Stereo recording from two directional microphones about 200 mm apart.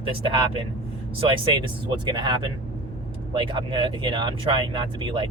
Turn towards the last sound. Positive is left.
turn(degrees=-25)  # may be behind; listen again after turning